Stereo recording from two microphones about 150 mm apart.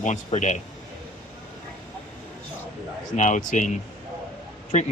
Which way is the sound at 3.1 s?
55° left (ahead or behind).